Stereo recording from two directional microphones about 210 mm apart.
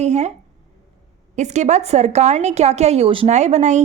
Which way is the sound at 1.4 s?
35° right (ahead or behind).